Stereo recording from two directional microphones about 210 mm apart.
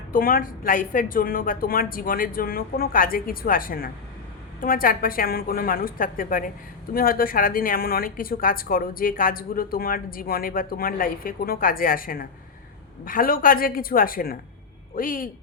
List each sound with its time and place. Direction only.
0.1 s speech: 45° left (ahead or behind)